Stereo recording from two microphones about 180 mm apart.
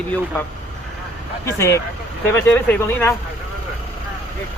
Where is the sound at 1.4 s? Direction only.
15° left (ahead or behind).